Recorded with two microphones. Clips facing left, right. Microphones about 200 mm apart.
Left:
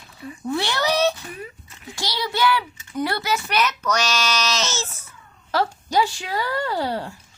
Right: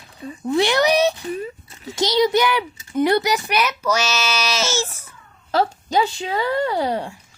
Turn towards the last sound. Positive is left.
turn(degrees=-20)  # may be behind; listen again after turning